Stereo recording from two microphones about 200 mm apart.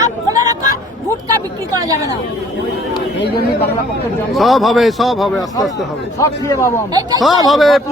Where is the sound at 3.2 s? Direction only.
55° left (ahead or behind).